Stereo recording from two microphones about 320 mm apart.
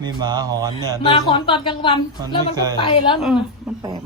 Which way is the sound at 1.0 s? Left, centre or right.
Centre.